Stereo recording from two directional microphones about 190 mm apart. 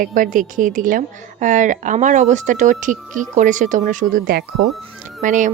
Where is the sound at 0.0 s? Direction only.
45° right (ahead or behind).